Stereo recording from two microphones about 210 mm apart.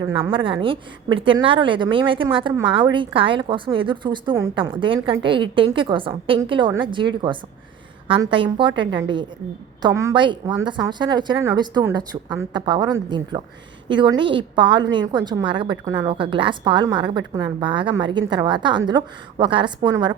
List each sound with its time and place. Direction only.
0.0 s a woman's voice: 20° right (ahead or behind)